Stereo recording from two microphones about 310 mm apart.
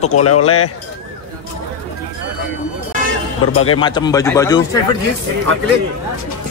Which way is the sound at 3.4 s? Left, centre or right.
Left.